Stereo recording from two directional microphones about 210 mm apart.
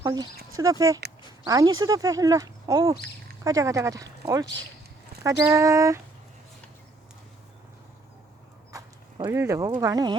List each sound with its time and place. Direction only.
0.0 s speech: 20° right (ahead or behind)
5.2 s speech: 15° right (ahead or behind)
8.7 s speech: 20° right (ahead or behind)